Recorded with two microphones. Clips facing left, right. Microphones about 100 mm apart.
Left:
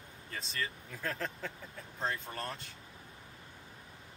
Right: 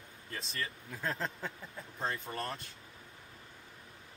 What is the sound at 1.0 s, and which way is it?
Speech, 25° right (ahead or behind).